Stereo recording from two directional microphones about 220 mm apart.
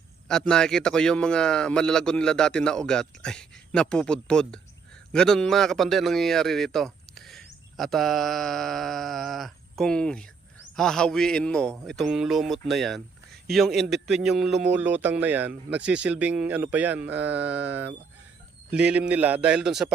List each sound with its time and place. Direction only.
0.3 s speech: 5° left (ahead or behind)